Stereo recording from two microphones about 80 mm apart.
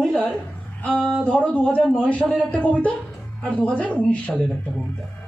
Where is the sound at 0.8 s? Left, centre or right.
Centre.